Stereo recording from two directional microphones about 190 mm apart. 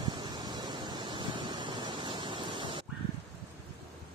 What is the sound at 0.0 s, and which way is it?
Waves, 20° right (ahead or behind).